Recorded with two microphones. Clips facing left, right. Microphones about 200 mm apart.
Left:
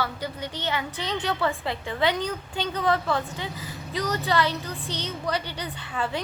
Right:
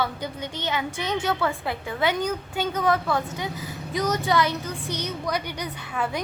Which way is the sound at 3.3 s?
15° right (ahead or behind).